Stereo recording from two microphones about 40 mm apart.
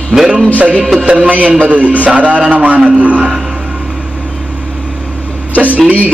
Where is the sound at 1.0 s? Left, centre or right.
Right.